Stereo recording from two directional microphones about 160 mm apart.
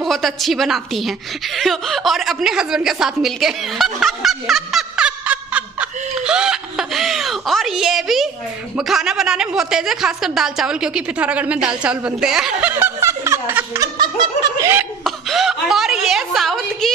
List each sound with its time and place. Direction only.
0.0 s a woman's voice: centre (ahead or behind)
13.9 s snicker: 25° right (ahead or behind)
15.0 s a woman's voice: centre (ahead or behind)